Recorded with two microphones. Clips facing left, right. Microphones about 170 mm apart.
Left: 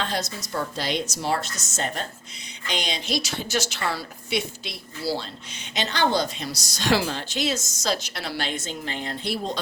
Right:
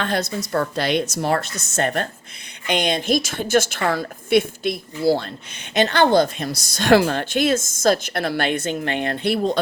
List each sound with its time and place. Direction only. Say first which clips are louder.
0.0 s a woman's voice: right 6 dB; 55° right (ahead or behind)